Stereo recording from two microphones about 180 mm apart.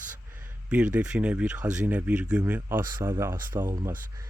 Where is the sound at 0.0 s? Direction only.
10° right (ahead or behind).